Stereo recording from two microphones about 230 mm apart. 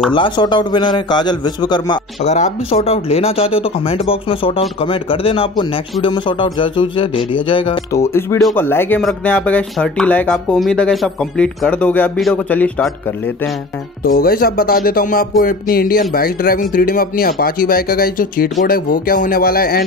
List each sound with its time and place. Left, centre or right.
0.1 s speech: left
14.0 s speech: left